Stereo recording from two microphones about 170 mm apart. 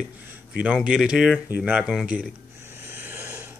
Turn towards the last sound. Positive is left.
turn(degrees=-15)  # may be behind; listen again after turning